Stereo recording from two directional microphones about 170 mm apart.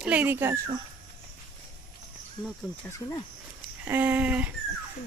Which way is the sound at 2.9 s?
20° left (ahead or behind).